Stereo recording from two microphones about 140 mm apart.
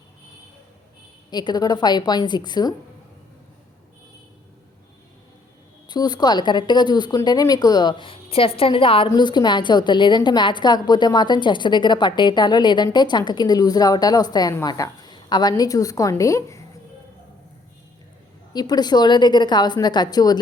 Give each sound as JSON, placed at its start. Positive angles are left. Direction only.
{"t": 1.3, "sound": "a woman's voice", "side_deg": 30}
{"t": 5.9, "sound": "a woman's voice", "side_deg": 30}
{"t": 18.5, "sound": "a woman's voice", "side_deg": 30}